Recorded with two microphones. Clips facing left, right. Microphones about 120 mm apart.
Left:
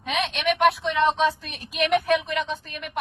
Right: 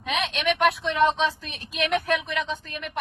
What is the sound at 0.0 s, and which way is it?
A woman's voice, centre (ahead or behind).